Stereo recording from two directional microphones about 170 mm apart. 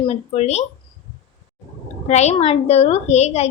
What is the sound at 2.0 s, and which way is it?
A woman's voice, 40° left (ahead or behind).